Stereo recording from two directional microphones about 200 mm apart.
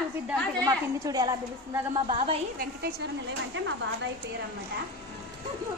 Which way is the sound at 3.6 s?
70° right (ahead or behind).